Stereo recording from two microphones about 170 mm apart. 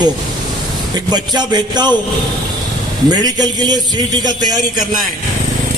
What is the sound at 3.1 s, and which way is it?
A man's voice, 25° right (ahead or behind).